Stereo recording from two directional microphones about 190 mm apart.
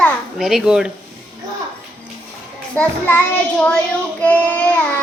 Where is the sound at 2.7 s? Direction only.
10° left (ahead or behind).